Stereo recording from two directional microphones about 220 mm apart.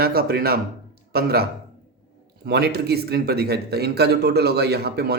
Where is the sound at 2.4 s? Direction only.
45° right (ahead or behind).